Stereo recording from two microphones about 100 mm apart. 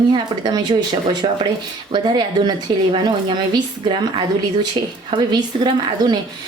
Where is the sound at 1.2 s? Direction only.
65° right (ahead or behind).